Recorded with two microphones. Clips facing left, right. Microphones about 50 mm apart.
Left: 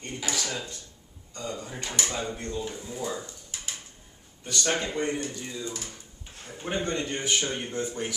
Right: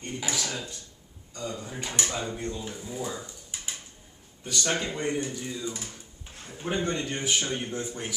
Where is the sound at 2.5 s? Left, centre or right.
Centre.